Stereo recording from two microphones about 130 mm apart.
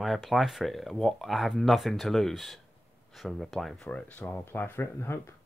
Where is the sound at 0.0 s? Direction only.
Centre (ahead or behind); by 5.3 s 20° left (ahead or behind).